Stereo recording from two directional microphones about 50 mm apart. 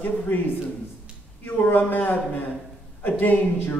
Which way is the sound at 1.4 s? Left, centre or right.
Left.